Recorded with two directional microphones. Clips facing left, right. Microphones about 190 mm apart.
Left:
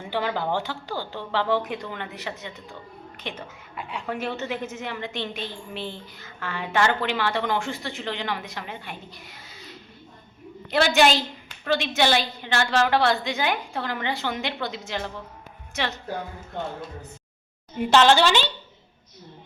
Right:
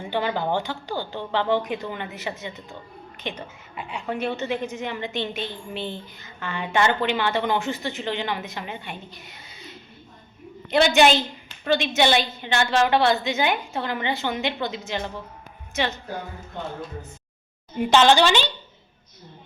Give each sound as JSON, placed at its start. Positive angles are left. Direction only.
{"t": 0.0, "sound": "a woman's voice", "side_deg": 0}
{"t": 17.7, "sound": "a woman's voice", "side_deg": 0}